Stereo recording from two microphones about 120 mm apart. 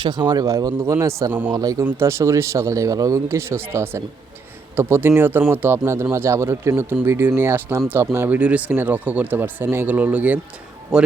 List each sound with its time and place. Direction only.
0.0 s speech: 40° right (ahead or behind)
1.3 s speech: 15° right (ahead or behind)
1.5 s speech: 30° right (ahead or behind); by 11.1 s 5° right (ahead or behind)